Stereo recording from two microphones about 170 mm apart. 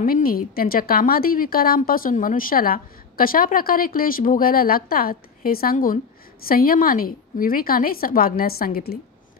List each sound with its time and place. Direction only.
0.0 s speech: 60° left (ahead or behind)